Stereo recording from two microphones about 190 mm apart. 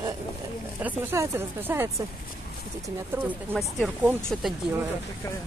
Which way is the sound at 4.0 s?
10° right (ahead or behind).